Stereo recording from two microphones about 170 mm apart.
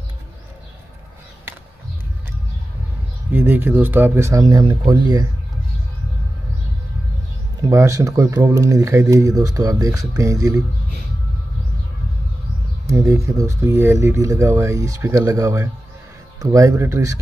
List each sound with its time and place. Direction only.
3.3 s speech: 10° right (ahead or behind)
7.6 s speech: 20° right (ahead or behind)
12.9 s speech: 20° right (ahead or behind)